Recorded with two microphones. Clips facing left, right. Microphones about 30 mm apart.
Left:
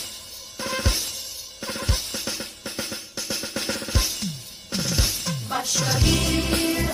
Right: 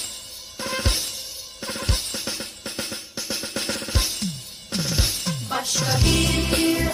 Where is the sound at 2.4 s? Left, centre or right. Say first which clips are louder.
Even; right.